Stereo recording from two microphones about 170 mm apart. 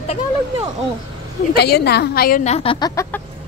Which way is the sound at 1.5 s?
70° left (ahead or behind).